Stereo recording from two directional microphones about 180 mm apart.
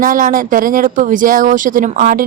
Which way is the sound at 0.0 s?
50° right (ahead or behind).